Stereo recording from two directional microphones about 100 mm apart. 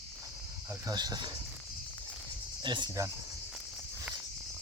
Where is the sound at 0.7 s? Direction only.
40° right (ahead or behind).